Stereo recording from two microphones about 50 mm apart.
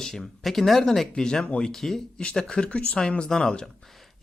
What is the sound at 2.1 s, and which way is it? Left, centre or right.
Speech, centre.